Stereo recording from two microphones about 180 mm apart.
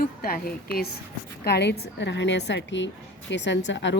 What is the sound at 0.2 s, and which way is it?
A woman's voice, 60° left (ahead or behind).